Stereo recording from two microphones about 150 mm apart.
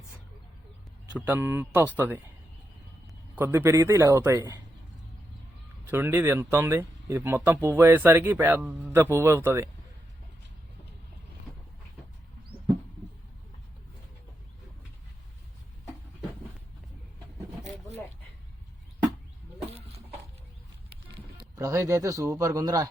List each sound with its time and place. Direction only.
1.2 s speech: 15° right (ahead or behind)
3.3 s speech: 15° right (ahead or behind)
5.8 s speech: 10° right (ahead or behind)
21.5 s speech: 20° right (ahead or behind)